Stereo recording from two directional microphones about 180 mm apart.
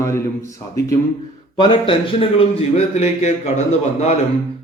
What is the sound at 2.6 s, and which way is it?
Speech, 35° left (ahead or behind).